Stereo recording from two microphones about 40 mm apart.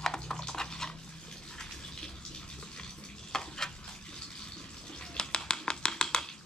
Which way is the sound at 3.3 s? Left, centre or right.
Centre.